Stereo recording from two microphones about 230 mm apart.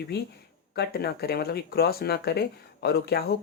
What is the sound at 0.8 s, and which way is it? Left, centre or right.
Speech, left.